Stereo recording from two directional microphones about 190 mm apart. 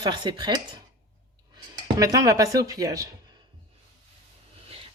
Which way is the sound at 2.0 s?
20° right (ahead or behind).